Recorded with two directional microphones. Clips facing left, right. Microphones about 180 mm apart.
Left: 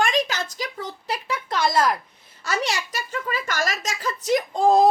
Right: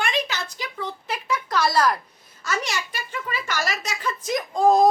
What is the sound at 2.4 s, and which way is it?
A woman's voice, 35° left (ahead or behind).